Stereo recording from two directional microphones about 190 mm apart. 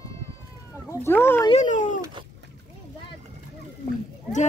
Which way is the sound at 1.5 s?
40° left (ahead or behind).